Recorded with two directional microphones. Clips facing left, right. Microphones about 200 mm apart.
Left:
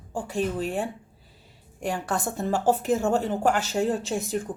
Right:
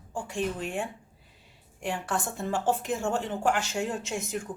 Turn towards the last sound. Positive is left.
turn(degrees=35)  # may be behind; listen again after turning